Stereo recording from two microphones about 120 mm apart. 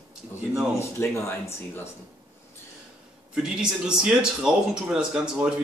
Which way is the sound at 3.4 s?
5° right (ahead or behind).